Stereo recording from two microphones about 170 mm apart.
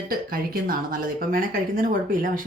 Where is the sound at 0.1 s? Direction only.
60° right (ahead or behind).